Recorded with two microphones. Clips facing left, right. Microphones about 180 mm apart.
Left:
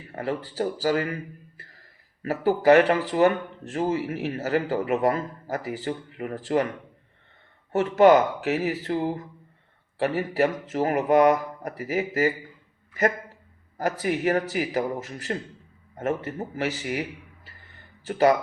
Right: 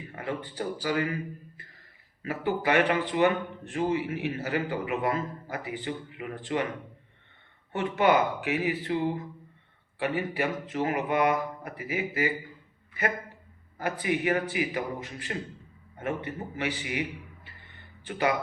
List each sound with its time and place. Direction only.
0.1 s speech: 35° left (ahead or behind)
2.2 s speech: 40° left (ahead or behind)
7.7 s speech: 40° left (ahead or behind)
14.0 s speech: 40° left (ahead or behind)
18.0 s speech: 40° left (ahead or behind)